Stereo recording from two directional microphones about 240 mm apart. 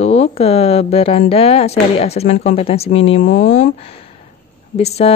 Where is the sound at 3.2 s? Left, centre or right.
Left.